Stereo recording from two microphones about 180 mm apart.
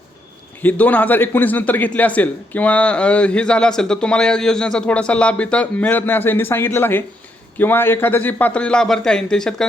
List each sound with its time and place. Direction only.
0.6 s a man's voice: 10° left (ahead or behind)